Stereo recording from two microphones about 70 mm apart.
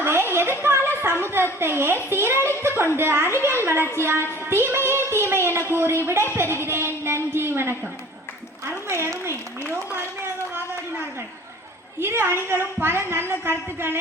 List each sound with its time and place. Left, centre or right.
0.0 s a sound: right
1.5 s a woman's voice: right
11.9 s a woman's voice: right